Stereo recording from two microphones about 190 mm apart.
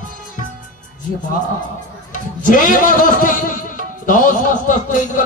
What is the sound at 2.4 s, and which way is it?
Speech, 45° left (ahead or behind).